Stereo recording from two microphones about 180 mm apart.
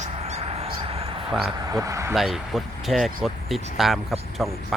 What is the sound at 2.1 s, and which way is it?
Speech, centre (ahead or behind).